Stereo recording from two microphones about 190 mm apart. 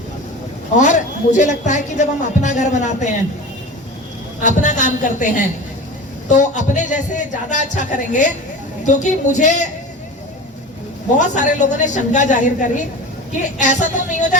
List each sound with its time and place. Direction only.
0.8 s speech: 40° left (ahead or behind)
4.4 s speech: 40° left (ahead or behind)
11.2 s speech: 40° left (ahead or behind)